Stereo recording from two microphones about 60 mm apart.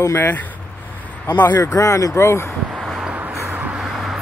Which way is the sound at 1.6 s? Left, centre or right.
Left.